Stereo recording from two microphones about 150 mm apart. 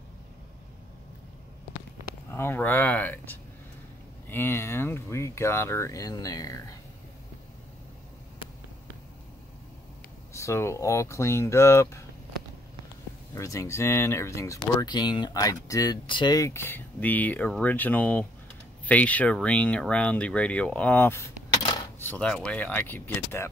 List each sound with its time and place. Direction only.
2.3 s speech: 15° left (ahead or behind)
10.3 s speech: 20° left (ahead or behind)
13.3 s speech: 20° left (ahead or behind)